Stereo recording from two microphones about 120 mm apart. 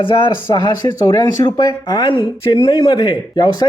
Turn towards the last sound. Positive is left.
turn(degrees=40)  # may be behind; listen again after turning